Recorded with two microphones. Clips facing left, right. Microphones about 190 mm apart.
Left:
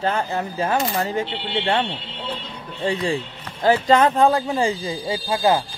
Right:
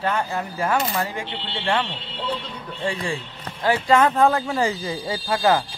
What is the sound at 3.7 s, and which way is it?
Speech, 40° left (ahead or behind).